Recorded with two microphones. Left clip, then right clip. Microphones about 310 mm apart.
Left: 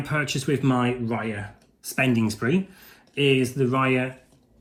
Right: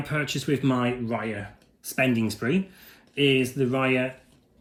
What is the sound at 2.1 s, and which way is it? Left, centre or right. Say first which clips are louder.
Speech: left 2 dB; left.